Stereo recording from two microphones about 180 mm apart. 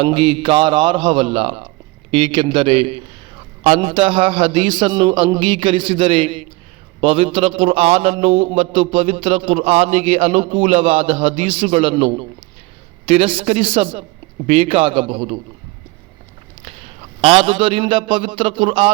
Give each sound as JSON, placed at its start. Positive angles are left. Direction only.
{"t": 0.0, "sound": "a man's voice", "side_deg": -30}
{"t": 16.6, "sound": "a man's voice", "side_deg": -30}